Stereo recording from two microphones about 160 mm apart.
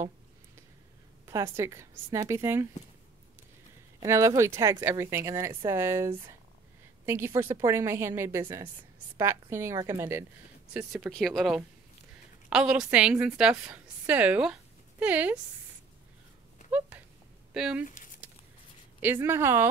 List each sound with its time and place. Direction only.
1.2 s speech: 15° right (ahead or behind)
4.0 s speech: 20° right (ahead or behind)
10.7 s a woman's voice: 5° right (ahead or behind)
17.6 s speech: 5° right (ahead or behind)
17.8 s a sound: 55° left (ahead or behind)
18.9 s speech: 10° right (ahead or behind)